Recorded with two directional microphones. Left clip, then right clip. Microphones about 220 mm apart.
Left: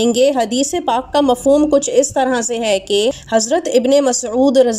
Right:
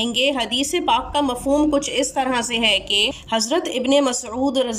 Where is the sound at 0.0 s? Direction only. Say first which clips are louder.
Left 7 dB; 20° left (ahead or behind).